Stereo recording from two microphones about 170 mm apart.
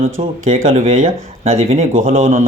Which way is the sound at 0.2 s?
50° right (ahead or behind).